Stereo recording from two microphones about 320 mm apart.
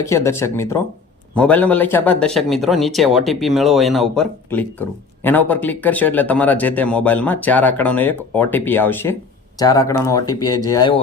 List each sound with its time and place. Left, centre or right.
0.0 s speech: centre